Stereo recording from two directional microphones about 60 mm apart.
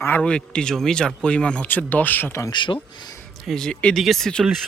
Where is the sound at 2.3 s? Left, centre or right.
Left.